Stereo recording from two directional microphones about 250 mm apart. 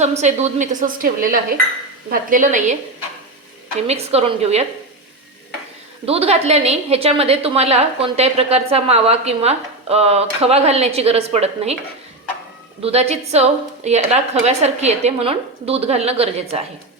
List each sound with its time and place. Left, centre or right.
0.0 s a woman's voice: right
3.8 s a woman's voice: right
6.1 s a woman's voice: right
12.8 s a woman's voice: right